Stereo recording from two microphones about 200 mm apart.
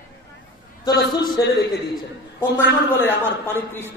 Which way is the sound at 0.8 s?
20° left (ahead or behind).